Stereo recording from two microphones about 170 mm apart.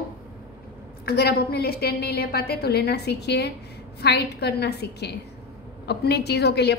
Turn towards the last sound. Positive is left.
turn(degrees=75)  # may be behind; listen again after turning